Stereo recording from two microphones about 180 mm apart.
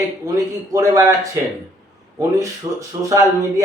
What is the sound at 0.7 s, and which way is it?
Speech, 15° right (ahead or behind).